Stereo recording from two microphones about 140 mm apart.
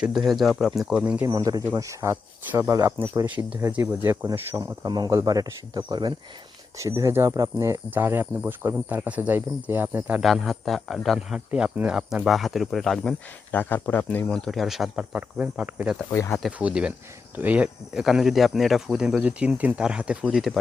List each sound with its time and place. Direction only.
0.0 s a man's voice: 5° right (ahead or behind)
1.3 s speech: 25° right (ahead or behind)
3.2 s speech: 10° right (ahead or behind)
10.2 s a man's voice: centre (ahead or behind)